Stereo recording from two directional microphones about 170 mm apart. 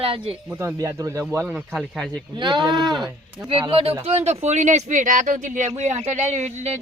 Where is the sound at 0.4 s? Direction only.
15° right (ahead or behind).